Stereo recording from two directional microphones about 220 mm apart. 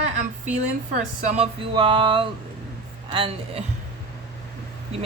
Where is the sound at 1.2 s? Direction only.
25° right (ahead or behind).